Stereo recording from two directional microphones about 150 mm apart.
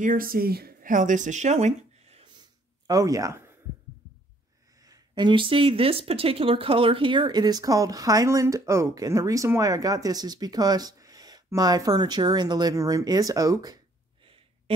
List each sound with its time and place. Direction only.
0.0 s speech: 70° right (ahead or behind); by 2.2 s 45° right (ahead or behind)
2.2 s a sound: 30° right (ahead or behind)
4.8 s speech: 25° right (ahead or behind)